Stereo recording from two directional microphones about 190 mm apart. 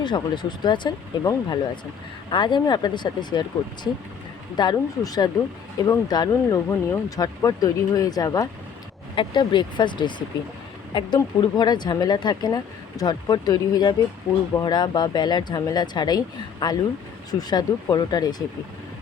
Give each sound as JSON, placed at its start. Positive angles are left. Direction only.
{"t": 0.0, "sound": "speech", "side_deg": 25}
{"t": 4.5, "sound": "speech", "side_deg": 20}